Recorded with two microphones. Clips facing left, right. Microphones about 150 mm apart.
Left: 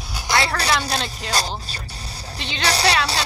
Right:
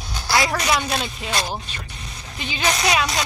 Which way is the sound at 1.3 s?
35° left (ahead or behind).